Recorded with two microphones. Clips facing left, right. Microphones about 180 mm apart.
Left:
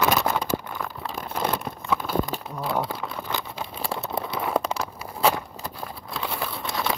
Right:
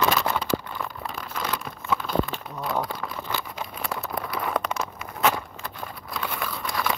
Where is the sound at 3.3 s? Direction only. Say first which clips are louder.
Left 1 dB; 25° left (ahead or behind).